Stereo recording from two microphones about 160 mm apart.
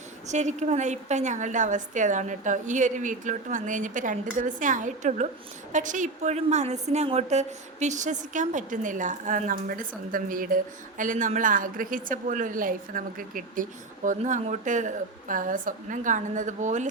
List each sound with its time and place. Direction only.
0.3 s a woman's voice: 45° right (ahead or behind)